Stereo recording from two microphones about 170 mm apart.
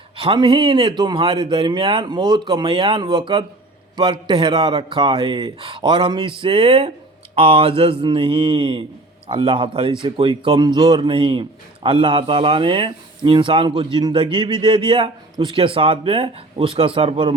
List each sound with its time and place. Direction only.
0.2 s speech: 30° right (ahead or behind)